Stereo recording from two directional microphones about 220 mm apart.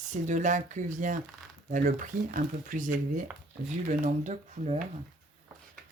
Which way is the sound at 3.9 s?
35° right (ahead or behind).